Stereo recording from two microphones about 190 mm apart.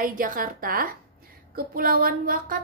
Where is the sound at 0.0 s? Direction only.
45° right (ahead or behind).